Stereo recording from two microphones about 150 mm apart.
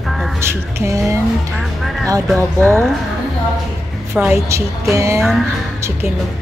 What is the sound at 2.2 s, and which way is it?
Speech, 5° left (ahead or behind).